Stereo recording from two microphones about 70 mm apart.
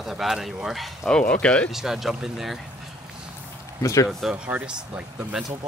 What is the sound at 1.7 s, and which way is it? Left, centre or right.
Speech, centre.